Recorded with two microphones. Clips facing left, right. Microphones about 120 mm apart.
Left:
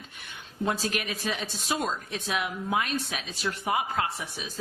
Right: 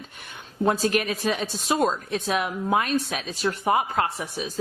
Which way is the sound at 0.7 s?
45° right (ahead or behind).